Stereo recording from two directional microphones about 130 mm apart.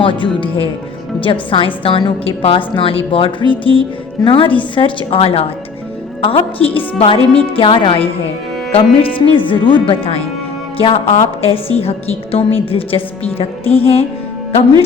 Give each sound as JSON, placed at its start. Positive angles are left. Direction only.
{"t": 0.0, "sound": "a woman's voice", "side_deg": 40}
{"t": 3.6, "sound": "music", "side_deg": 40}
{"t": 4.7, "sound": "a woman's voice", "side_deg": 40}